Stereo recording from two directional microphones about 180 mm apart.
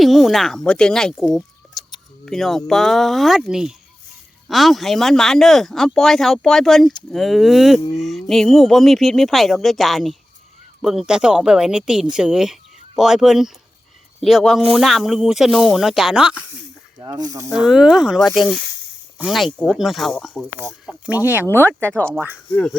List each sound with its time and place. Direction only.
0.0 s speech: centre (ahead or behind)
1.8 s a sound: 20° left (ahead or behind)
2.2 s speech: centre (ahead or behind)
17.0 s speech: 20° right (ahead or behind)
17.5 s speech: 5° right (ahead or behind)
20.8 s speech: 10° right (ahead or behind)
21.4 s speech: 10° left (ahead or behind)